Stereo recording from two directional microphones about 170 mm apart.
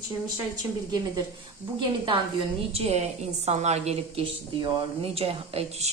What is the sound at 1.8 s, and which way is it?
A woman's voice, 30° right (ahead or behind).